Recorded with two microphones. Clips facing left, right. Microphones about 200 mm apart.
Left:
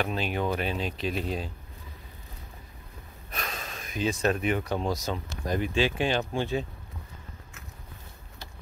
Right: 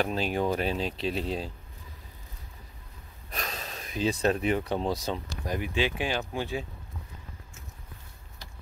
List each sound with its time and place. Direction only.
0.0 s speech: 35° right (ahead or behind)
3.3 s gasp: 35° right (ahead or behind)
4.8 s speech: 30° right (ahead or behind)
5.4 s speech: 10° right (ahead or behind)